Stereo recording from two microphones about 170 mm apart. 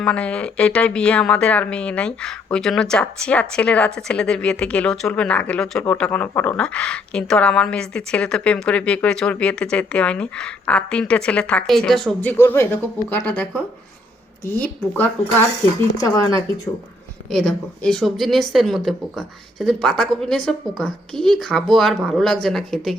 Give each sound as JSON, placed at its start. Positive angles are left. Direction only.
{"t": 0.0, "sound": "speech", "side_deg": 5}
{"t": 16.0, "sound": "speech", "side_deg": 20}
{"t": 17.2, "sound": "a woman's voice", "side_deg": 5}